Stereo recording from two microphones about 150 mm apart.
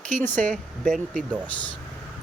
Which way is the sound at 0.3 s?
55° right (ahead or behind).